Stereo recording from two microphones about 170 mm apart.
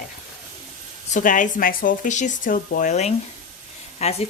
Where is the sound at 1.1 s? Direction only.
50° left (ahead or behind).